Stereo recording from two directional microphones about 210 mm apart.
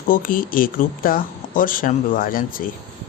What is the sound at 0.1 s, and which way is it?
Speech, 40° left (ahead or behind).